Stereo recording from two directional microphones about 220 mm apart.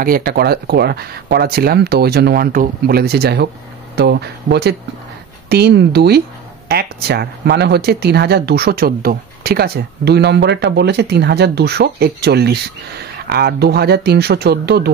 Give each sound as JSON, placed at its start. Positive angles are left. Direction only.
{"t": 0.0, "sound": "speech", "side_deg": -45}